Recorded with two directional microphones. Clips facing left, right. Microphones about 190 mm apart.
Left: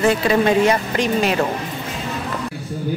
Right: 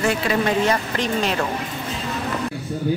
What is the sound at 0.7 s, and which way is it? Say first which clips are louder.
Speech: left 3 dB; 10° left (ahead or behind).